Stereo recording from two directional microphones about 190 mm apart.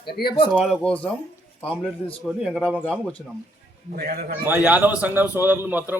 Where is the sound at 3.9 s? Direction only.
50° right (ahead or behind).